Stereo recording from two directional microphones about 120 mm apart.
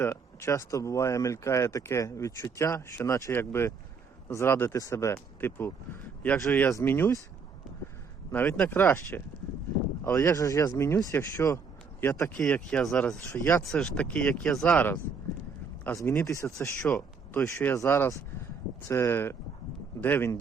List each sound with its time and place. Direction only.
0.0 s speech: 25° left (ahead or behind)
8.3 s speech: 10° left (ahead or behind)
12.4 s speech: 10° left (ahead or behind)
13.2 s speech: 25° left (ahead or behind)
13.7 s speech: 5° left (ahead or behind)
16.0 s speech: 25° left (ahead or behind)
16.8 s speech: 10° left (ahead or behind)